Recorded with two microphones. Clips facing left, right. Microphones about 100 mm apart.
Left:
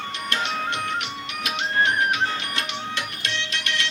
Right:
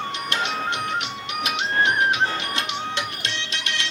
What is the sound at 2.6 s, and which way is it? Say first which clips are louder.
Music: right 2 dB; 20° right (ahead or behind).